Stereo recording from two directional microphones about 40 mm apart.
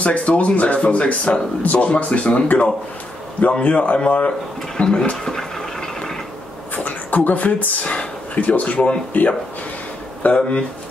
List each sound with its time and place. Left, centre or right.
0.0 s speech: left
5.1 s a sound: centre
6.7 s a sound: left
8.4 s speech: left
9.1 s speech: left
10.2 s speech: left